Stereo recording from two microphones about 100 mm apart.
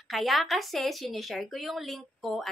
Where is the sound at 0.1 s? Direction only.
Centre (ahead or behind).